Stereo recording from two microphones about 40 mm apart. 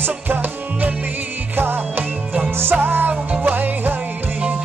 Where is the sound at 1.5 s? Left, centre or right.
Right.